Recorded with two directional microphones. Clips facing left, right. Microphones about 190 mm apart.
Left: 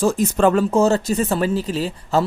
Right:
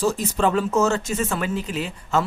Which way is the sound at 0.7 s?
35° left (ahead or behind).